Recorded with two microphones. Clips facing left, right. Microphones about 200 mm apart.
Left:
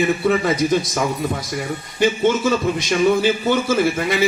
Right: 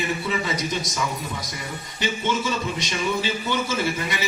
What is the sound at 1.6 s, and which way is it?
A man's voice, 50° left (ahead or behind).